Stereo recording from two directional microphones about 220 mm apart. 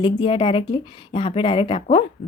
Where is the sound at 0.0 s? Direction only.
25° left (ahead or behind).